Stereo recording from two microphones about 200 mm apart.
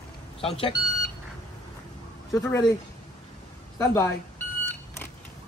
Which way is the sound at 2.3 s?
15° left (ahead or behind).